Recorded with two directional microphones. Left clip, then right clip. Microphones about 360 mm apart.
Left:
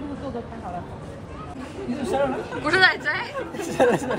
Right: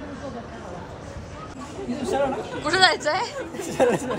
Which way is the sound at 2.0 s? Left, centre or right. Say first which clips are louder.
Even; centre.